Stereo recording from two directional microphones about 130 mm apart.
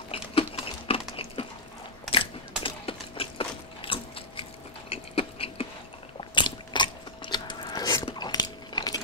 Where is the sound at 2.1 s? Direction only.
45° left (ahead or behind).